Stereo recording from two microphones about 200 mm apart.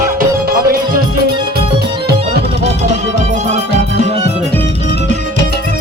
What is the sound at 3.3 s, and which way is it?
Music, 35° right (ahead or behind).